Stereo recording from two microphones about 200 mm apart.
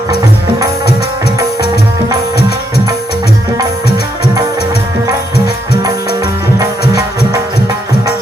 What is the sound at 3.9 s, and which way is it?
Music, 55° left (ahead or behind).